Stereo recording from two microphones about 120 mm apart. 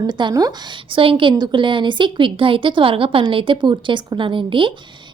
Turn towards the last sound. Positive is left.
turn(degrees=-45)  # may be behind; listen again after turning